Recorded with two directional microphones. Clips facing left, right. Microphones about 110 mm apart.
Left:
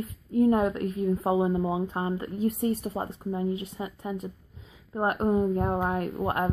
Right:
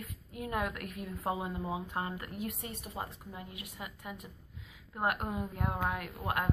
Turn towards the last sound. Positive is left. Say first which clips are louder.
# left 8 dB
turn(degrees=35)  # may be behind; listen again after turning